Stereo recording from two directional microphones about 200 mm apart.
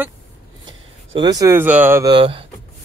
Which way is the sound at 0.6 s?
25° right (ahead or behind).